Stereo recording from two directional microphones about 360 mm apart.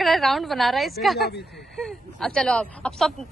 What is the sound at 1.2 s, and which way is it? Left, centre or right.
Speech, left.